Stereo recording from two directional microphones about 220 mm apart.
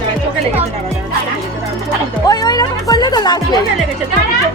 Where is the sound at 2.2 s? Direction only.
20° left (ahead or behind).